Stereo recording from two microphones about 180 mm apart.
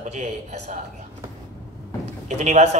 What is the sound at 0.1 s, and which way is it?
Speech, 40° right (ahead or behind).